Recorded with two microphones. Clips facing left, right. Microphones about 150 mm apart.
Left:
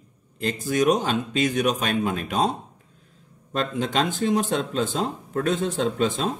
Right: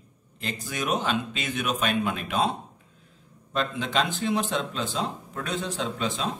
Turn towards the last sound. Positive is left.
turn(degrees=45)  # may be behind; listen again after turning